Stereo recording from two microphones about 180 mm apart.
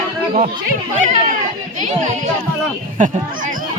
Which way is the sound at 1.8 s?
45° right (ahead or behind).